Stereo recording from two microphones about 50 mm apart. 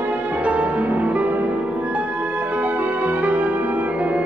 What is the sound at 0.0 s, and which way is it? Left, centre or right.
Music, right.